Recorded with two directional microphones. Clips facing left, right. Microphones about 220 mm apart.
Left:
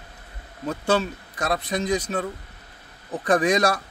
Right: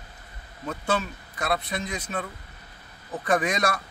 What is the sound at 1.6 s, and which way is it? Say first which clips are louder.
Speech: left 7 dB; 35° left (ahead or behind).